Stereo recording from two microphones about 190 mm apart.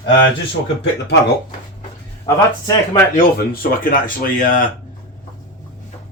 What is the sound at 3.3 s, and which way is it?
Speech, 50° left (ahead or behind).